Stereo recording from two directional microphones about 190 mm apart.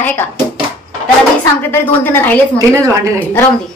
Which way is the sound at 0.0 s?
10° left (ahead or behind).